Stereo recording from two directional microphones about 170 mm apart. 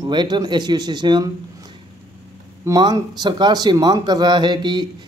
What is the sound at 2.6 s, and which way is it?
Speech, 20° right (ahead or behind).